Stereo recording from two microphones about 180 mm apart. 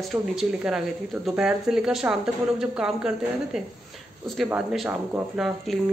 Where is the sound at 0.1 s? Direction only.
5° right (ahead or behind).